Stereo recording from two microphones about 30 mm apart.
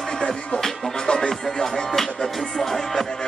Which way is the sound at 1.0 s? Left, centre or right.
Left.